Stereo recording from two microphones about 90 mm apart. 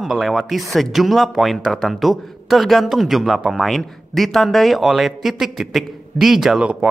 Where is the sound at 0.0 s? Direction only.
Centre (ahead or behind).